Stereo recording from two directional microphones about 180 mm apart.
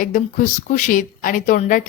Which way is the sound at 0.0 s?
45° left (ahead or behind).